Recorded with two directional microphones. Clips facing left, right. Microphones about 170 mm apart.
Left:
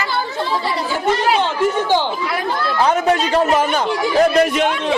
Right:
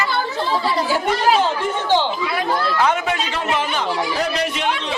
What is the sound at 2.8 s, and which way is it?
A man's voice, 40° left (ahead or behind).